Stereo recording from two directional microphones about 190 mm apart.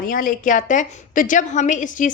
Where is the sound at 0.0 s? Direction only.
45° left (ahead or behind).